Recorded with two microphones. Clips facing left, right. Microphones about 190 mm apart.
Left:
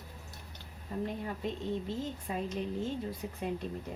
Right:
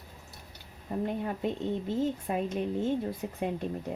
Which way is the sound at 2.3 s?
60° right (ahead or behind).